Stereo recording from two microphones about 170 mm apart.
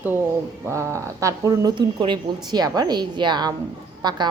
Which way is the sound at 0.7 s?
15° right (ahead or behind).